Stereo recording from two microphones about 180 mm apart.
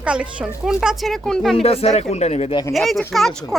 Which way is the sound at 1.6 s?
35° left (ahead or behind).